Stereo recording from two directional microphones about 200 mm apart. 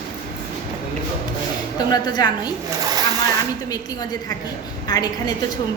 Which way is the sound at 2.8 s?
20° right (ahead or behind).